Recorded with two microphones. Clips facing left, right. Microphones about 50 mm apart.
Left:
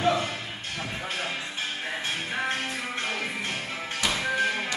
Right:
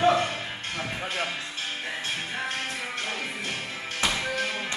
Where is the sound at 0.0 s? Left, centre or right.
Right.